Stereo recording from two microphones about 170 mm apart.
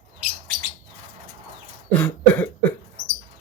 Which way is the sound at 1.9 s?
10° left (ahead or behind).